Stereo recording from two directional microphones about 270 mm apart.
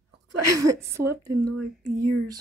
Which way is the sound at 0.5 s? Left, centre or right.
Centre.